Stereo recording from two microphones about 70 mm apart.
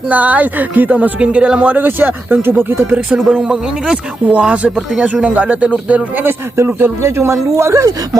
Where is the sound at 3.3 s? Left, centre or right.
Centre.